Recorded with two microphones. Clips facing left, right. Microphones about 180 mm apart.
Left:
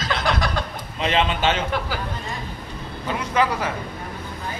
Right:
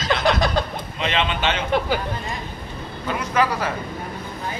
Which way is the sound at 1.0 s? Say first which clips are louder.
Left 2 dB; 40° left (ahead or behind).